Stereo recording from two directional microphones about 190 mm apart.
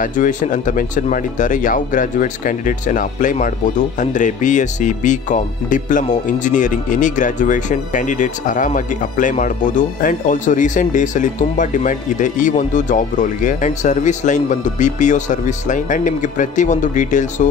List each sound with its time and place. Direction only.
0.0 s speech: 45° left (ahead or behind)